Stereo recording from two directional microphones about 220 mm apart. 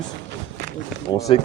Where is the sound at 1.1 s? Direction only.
20° left (ahead or behind).